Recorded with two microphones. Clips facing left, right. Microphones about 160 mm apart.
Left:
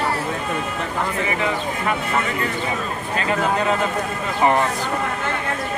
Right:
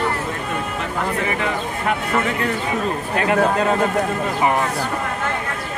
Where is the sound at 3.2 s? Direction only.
60° right (ahead or behind).